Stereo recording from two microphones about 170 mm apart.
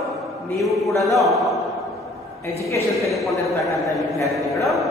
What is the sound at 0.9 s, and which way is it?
Speech, 20° left (ahead or behind).